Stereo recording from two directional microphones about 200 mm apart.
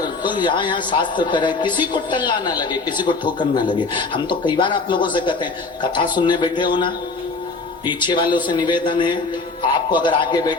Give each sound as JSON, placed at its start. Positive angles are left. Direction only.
{"t": 0.0, "sound": "a man's voice", "side_deg": 20}